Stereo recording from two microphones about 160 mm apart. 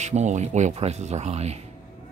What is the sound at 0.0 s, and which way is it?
Speech, 45° right (ahead or behind).